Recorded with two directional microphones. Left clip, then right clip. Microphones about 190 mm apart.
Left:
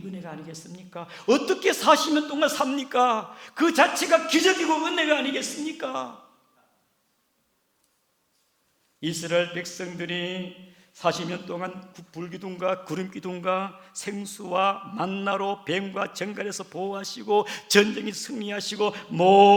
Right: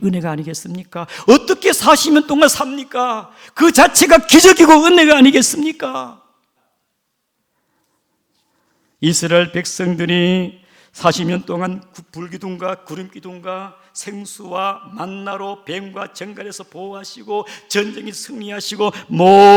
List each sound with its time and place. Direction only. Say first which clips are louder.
0.1 s a man's voice: right 15 dB; 40° right (ahead or behind)
2.6 s speech: right 3 dB; 15° right (ahead or behind)
3.5 s a man's voice: right 11 dB; 40° right (ahead or behind)
5.7 s speech: right 8 dB; 25° right (ahead or behind)
9.0 s a man's voice: right 11 dB; 30° right (ahead or behind)
12.5 s speech: right 3 dB; 25° right (ahead or behind)
12.8 s a man's voice: right 1 dB; 10° right (ahead or behind)
13.9 s speech: right 3 dB; 15° right (ahead or behind)